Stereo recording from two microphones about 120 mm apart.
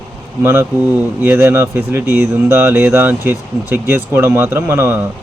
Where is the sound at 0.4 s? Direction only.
20° right (ahead or behind).